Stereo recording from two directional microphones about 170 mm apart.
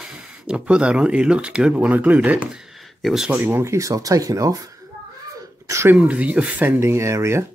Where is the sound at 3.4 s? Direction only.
15° right (ahead or behind).